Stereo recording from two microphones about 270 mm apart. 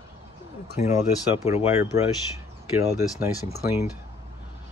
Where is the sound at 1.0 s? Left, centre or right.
Centre.